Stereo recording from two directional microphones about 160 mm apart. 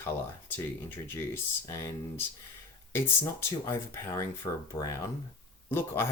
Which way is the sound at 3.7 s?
15° left (ahead or behind).